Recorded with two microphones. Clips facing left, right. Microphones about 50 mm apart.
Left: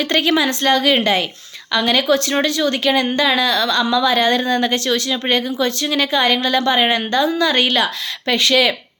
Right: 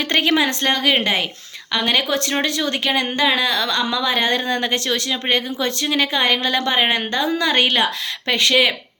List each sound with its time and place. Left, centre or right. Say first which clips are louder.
0.0 s speech: left 1 dB; right